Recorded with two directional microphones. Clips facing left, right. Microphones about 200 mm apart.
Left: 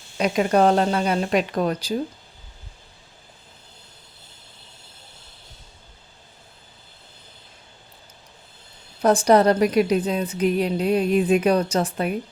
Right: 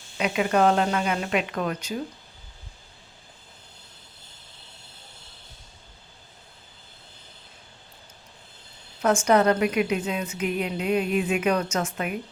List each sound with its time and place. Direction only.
0.2 s a woman's voice: 35° left (ahead or behind)
9.0 s a woman's voice: 35° left (ahead or behind)